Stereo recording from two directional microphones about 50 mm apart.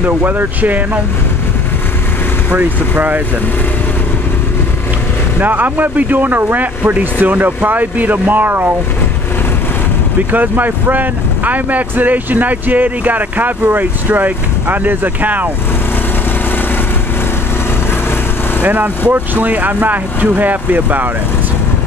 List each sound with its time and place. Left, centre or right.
0.0 s speech: right
5.4 s speech: right
10.3 s speech: right
18.6 s speech: right